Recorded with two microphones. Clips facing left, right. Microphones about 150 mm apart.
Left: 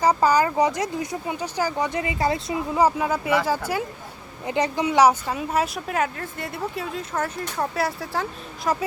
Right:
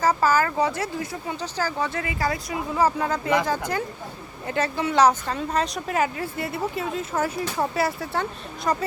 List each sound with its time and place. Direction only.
0.0 s speech: 15° left (ahead or behind)
2.8 s speech: 10° left (ahead or behind)